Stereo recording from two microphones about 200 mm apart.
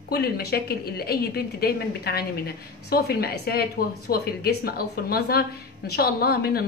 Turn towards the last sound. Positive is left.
turn(degrees=50)  # may be behind; listen again after turning